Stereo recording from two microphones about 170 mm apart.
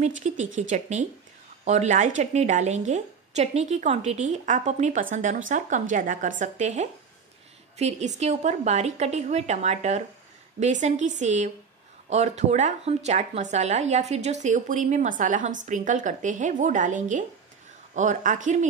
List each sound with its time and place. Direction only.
0.0 s a woman's voice: 45° right (ahead or behind)